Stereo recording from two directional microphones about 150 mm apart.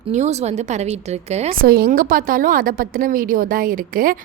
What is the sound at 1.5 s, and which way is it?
A woman's voice, 80° right.